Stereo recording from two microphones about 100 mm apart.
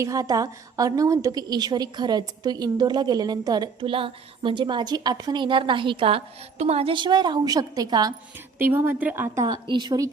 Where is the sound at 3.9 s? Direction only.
60° right (ahead or behind); by 7.0 s 85° right.